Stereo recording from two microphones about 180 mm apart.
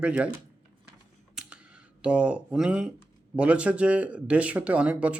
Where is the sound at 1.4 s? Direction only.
5° right (ahead or behind).